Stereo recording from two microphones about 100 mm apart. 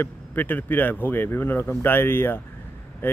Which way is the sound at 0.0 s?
20° left (ahead or behind).